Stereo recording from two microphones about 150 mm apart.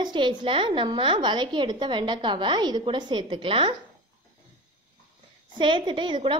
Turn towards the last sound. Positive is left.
turn(degrees=-35)  # may be behind; listen again after turning